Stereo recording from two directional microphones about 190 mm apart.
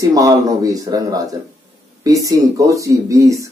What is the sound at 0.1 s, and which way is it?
Speech, 20° right (ahead or behind).